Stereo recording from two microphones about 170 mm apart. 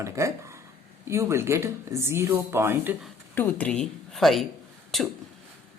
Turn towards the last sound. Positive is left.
turn(degrees=0)  # may be behind; listen again after turning